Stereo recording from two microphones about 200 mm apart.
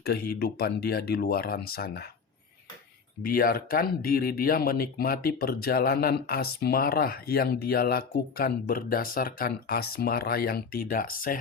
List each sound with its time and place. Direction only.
0.0 s speech: 50° left (ahead or behind)
3.2 s speech: 45° left (ahead or behind)